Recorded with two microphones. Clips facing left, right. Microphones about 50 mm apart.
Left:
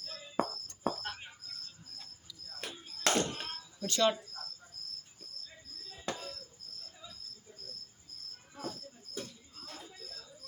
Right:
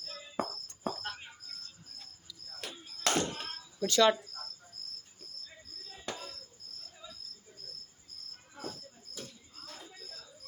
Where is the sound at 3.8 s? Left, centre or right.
Right.